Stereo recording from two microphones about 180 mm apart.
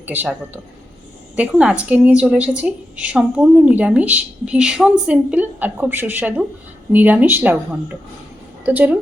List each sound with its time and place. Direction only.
0.0 s a woman's voice: 10° right (ahead or behind)
8.6 s a woman's voice: 10° right (ahead or behind)